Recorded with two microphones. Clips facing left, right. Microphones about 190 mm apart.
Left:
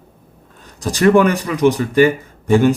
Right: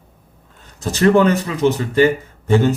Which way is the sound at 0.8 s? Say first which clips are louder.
Left 1 dB; 15° left (ahead or behind).